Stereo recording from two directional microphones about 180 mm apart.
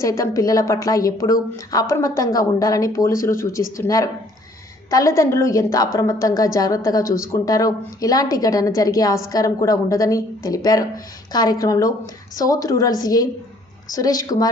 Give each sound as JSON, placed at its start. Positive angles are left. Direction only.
{"t": 0.0, "sound": "a woman's voice", "side_deg": 15}